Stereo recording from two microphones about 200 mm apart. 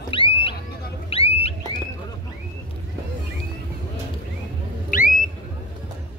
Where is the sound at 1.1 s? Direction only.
30° left (ahead or behind).